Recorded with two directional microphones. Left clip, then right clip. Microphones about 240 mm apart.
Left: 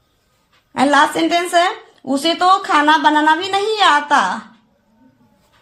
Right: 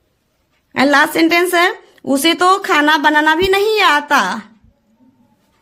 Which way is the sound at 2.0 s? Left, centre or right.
Right.